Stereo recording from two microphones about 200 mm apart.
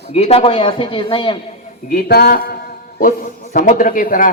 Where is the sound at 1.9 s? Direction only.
50° left (ahead or behind).